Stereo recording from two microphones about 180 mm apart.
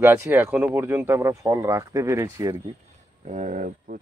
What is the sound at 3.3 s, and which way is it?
Speech, 45° right (ahead or behind).